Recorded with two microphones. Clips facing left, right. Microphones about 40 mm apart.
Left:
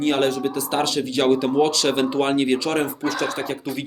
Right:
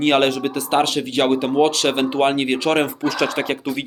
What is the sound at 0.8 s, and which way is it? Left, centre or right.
Speech, right.